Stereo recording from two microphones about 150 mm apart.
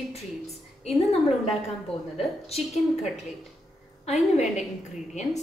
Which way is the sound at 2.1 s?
45° left (ahead or behind).